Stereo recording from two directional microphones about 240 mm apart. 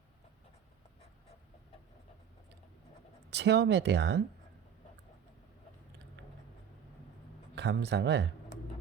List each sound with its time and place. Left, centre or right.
3.2 s speech: right
7.5 s speech: right